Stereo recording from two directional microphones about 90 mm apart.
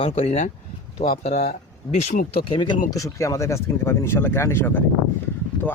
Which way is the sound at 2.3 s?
85° left.